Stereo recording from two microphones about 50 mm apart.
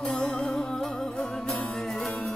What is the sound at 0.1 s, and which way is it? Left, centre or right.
Music, centre.